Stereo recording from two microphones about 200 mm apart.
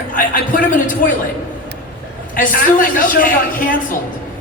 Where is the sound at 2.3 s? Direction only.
40° left (ahead or behind).